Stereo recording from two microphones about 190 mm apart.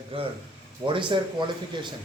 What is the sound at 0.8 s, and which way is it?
Speech, 25° right (ahead or behind).